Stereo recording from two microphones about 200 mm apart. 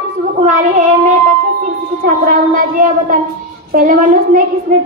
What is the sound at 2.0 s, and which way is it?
A woman's voice, 40° right (ahead or behind).